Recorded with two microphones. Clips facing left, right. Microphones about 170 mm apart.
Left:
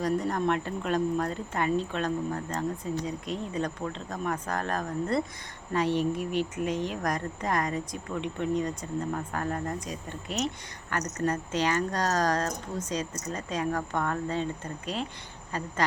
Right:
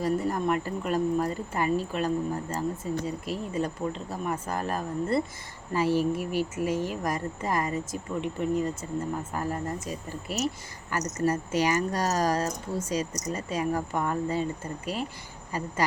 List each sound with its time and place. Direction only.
0.0 s speech: 5° right (ahead or behind)